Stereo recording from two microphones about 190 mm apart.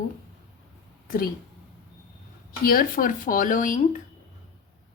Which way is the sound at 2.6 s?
50° left (ahead or behind).